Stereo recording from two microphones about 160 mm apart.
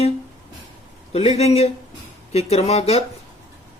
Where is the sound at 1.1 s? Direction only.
40° left (ahead or behind).